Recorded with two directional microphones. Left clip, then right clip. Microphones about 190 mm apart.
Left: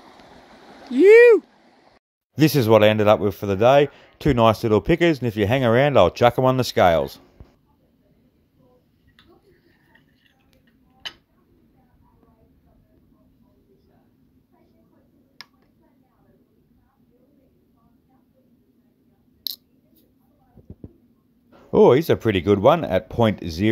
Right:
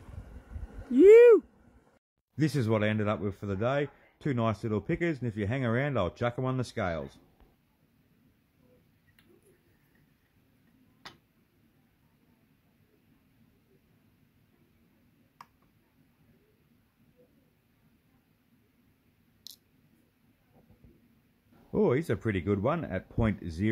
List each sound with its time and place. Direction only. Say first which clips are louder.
1.0 s speech: left 6 dB; 10° right (ahead or behind)
2.3 s speech: left 14 dB; 25° left (ahead or behind)
21.7 s speech: left 13 dB; 20° left (ahead or behind)